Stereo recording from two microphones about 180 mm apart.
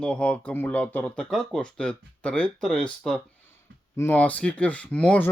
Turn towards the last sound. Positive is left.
turn(degrees=5)  # may be behind; listen again after turning